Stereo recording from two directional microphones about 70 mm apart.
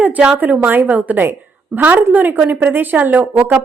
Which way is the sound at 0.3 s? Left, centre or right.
Right.